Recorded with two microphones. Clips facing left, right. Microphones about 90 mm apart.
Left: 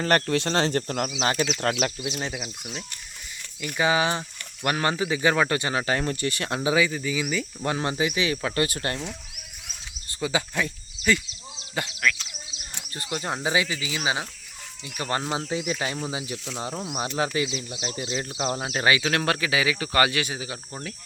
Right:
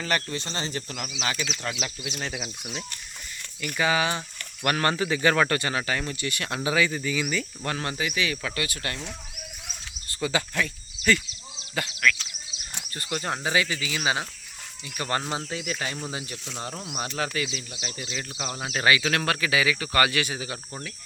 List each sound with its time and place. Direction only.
0.3 s speech: 75° left (ahead or behind)
0.8 s speech: 45° left (ahead or behind)
2.0 s speech: 25° left (ahead or behind)
2.3 s speech: centre (ahead or behind)
3.6 s speech: 20° left (ahead or behind)
4.6 s speech: 15° left (ahead or behind)
6.8 s speech: 5° left (ahead or behind); by 9.0 s 35° left (ahead or behind)
10.1 s speech: 15° left (ahead or behind)